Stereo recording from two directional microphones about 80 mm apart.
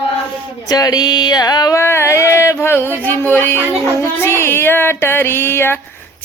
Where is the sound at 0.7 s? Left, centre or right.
Left.